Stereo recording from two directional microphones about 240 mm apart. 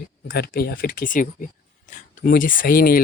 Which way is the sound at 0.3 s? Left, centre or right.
Left.